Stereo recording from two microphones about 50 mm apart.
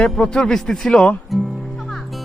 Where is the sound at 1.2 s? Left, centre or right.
Centre.